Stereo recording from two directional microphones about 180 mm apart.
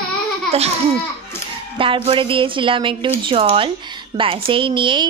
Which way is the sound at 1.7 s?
30° right (ahead or behind).